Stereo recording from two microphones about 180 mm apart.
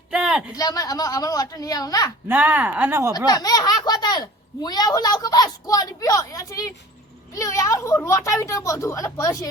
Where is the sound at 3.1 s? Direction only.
20° left (ahead or behind).